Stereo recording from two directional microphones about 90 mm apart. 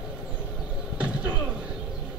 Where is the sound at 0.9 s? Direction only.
15° right (ahead or behind).